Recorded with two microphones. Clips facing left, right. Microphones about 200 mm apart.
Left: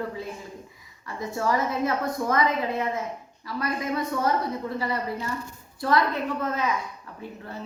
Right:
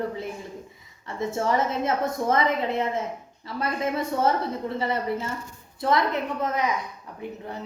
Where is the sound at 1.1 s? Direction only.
25° right (ahead or behind).